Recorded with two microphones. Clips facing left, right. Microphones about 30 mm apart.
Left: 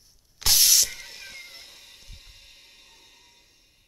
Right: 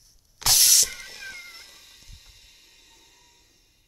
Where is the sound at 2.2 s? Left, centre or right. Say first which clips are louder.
Left 2 dB; left.